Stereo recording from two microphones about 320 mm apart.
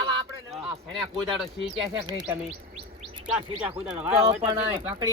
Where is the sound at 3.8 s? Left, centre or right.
Centre.